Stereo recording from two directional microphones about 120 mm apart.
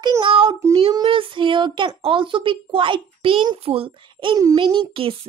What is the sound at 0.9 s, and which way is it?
A child's voice, 45° right (ahead or behind).